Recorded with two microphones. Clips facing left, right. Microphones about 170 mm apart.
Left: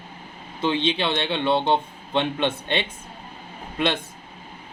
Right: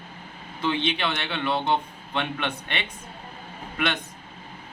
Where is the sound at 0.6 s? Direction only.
25° left (ahead or behind).